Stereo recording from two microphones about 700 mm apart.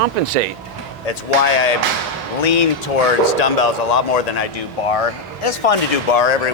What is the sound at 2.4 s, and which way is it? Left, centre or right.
Speech, left.